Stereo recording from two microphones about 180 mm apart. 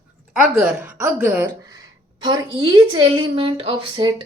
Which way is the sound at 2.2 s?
25° right (ahead or behind).